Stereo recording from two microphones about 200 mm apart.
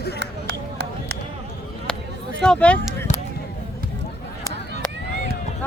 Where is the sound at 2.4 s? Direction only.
5° left (ahead or behind).